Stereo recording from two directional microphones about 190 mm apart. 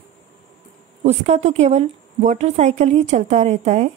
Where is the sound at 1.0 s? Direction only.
35° right (ahead or behind).